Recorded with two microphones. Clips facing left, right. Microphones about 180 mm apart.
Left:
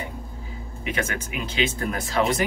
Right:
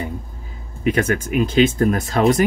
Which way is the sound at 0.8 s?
45° right (ahead or behind).